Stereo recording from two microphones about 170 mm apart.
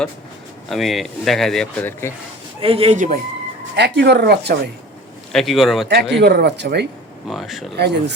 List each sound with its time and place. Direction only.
0.7 s speech: centre (ahead or behind)
2.6 s speech: 35° right (ahead or behind)
3.8 s speech: 80° right
5.3 s speech: centre (ahead or behind)
5.9 s speech: 75° right (ahead or behind)
7.3 s speech: centre (ahead or behind)
7.8 s speech: 80° right